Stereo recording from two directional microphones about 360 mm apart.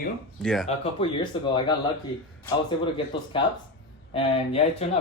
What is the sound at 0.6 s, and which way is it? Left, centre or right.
Speech, centre.